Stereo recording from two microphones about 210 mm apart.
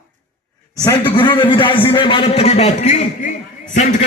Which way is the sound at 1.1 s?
25° left (ahead or behind).